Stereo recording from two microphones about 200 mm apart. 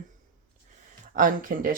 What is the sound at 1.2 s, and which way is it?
Speech, 45° right (ahead or behind).